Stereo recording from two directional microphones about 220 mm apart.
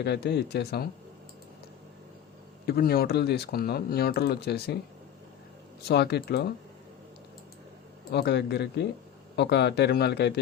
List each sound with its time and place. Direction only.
0.0 s speech: 50° left (ahead or behind)
2.6 s speech: 45° left (ahead or behind)
5.9 s speech: 50° left (ahead or behind)
8.1 s speech: 50° left (ahead or behind)